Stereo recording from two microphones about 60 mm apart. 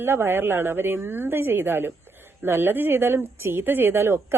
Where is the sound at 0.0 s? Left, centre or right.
Right.